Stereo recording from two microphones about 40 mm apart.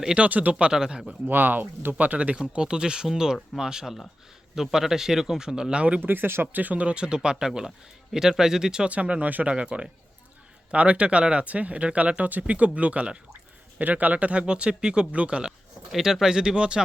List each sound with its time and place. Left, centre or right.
0.2 s speech: right
0.7 s speech: centre
1.3 s speech: right
2.4 s speech: right
6.0 s speech: right
6.8 s speech: right
8.9 s speech: right
15.1 s speech: right
15.9 s speech: centre; by 16.8 s right